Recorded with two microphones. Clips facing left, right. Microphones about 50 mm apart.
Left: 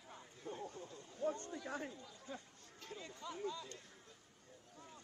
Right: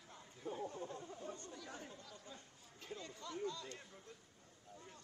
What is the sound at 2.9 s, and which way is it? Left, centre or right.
Speech, centre.